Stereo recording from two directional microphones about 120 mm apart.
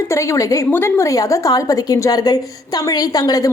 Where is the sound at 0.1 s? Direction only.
25° left (ahead or behind).